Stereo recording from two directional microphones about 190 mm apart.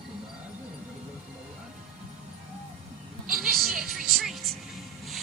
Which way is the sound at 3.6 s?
Centre (ahead or behind).